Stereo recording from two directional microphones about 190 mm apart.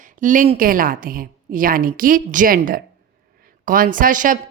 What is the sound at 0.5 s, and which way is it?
A woman's voice, 45° right (ahead or behind).